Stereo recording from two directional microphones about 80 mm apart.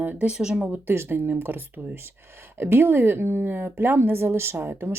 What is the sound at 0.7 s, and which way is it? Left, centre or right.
A woman's voice, right.